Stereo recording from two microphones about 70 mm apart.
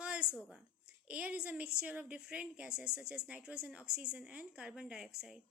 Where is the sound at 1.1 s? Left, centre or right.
Centre.